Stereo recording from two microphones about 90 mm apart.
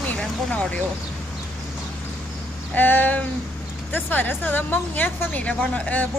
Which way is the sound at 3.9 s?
20° left (ahead or behind).